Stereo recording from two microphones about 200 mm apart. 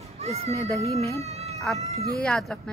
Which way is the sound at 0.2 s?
30° right (ahead or behind).